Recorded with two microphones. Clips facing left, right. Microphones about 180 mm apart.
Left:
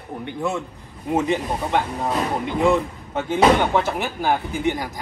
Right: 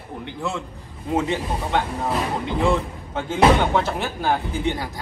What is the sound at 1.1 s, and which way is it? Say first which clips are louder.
Speech: left 2 dB; 15° left (ahead or behind).